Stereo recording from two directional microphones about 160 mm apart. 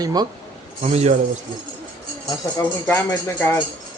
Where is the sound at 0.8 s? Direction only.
40° right (ahead or behind).